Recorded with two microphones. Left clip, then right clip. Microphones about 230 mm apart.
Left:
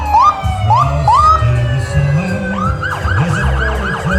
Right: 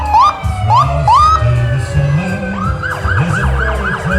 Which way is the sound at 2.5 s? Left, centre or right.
Left.